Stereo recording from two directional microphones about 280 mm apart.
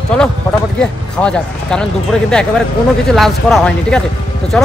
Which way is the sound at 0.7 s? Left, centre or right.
Centre.